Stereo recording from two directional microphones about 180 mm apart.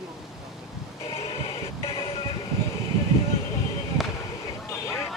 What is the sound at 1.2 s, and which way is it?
Music, 30° left (ahead or behind).